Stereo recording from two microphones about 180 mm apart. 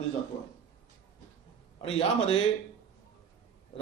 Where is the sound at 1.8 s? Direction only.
30° left (ahead or behind).